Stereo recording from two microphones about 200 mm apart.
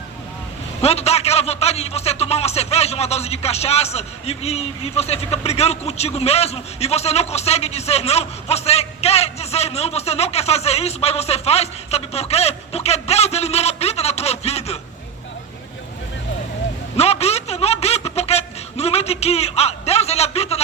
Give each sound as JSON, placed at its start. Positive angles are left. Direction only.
{"t": 0.8, "sound": "a man's voice", "side_deg": 30}
{"t": 17.0, "sound": "a man's voice", "side_deg": 30}